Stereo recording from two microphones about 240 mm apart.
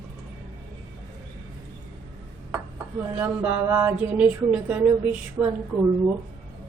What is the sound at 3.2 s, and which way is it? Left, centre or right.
Speech, centre.